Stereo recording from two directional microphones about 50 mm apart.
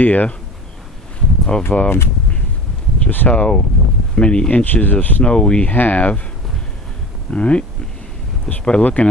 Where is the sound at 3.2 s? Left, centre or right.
Left.